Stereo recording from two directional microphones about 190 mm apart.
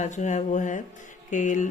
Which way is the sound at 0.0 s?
40° left (ahead or behind).